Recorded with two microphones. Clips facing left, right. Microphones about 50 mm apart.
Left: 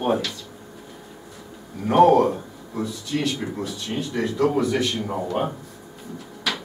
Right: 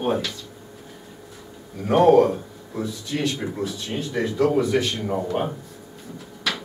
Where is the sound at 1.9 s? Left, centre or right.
Centre.